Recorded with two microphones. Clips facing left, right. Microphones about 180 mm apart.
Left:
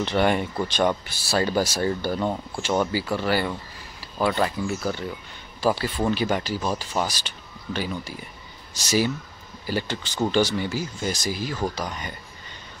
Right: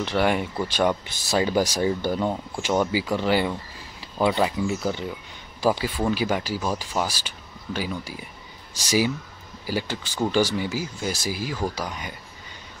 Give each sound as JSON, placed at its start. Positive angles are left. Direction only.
{"t": 0.0, "sound": "speech", "side_deg": -5}
{"t": 1.0, "sound": "speech", "side_deg": -20}